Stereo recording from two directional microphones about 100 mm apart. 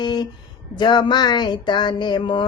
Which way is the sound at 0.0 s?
45° left (ahead or behind).